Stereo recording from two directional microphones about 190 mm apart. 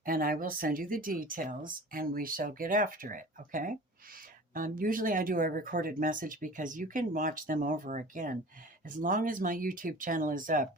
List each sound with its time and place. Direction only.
0.0 s speech: 50° right (ahead or behind)